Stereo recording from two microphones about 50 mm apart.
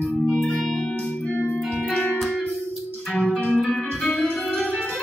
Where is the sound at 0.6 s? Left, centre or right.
Centre.